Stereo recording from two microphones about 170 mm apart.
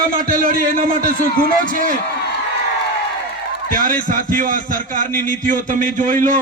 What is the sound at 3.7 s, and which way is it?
A man's voice, 55° right (ahead or behind).